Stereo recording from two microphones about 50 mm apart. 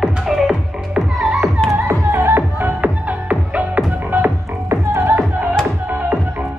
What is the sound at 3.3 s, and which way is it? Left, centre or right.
Music, right.